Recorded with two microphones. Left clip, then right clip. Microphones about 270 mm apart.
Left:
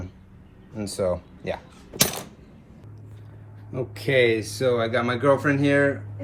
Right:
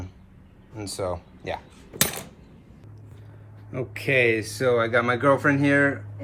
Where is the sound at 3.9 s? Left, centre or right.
Centre.